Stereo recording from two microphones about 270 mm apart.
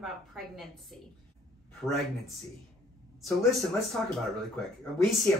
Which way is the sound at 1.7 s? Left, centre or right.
Centre.